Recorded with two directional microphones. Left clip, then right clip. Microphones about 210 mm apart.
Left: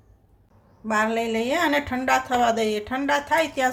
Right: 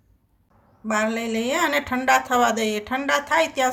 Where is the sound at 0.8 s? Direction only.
5° right (ahead or behind).